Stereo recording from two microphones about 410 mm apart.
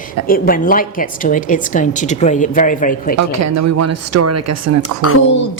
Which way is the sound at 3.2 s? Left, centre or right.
Right.